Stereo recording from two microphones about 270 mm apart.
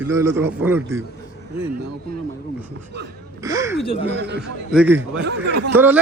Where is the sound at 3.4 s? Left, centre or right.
Centre.